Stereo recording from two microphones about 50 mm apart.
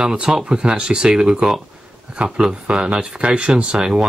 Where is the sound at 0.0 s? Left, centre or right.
Centre.